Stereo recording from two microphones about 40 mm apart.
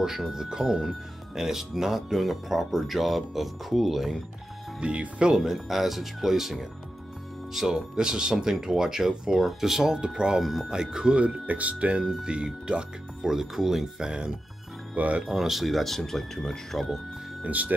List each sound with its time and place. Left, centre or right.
0.0 s speech: centre
4.7 s speech: right
5.3 s speech: centre
7.9 s speech: right
9.4 s speech: centre
10.4 s speech: centre; by 12.0 s right
12.0 s speech: centre
13.2 s speech: centre
15.0 s speech: right
15.2 s speech: centre
17.4 s speech: right